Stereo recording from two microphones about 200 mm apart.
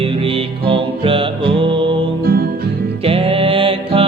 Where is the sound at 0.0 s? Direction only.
25° right (ahead or behind).